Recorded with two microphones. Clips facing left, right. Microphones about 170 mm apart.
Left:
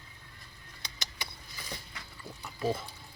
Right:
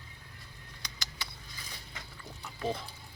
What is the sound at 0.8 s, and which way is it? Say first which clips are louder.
Vehicle: left 1 dB; 20° left (ahead or behind).